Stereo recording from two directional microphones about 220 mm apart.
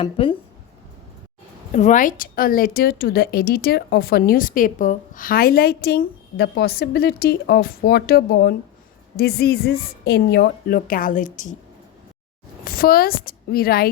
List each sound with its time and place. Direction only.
0.0 s speech: 25° left (ahead or behind)
1.7 s a woman's voice: 35° left (ahead or behind)
12.6 s a woman's voice: 40° left (ahead or behind)